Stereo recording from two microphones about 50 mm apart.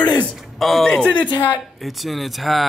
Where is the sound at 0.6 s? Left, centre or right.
Centre.